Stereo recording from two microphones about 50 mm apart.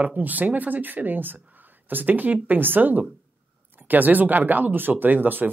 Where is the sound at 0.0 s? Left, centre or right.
Right.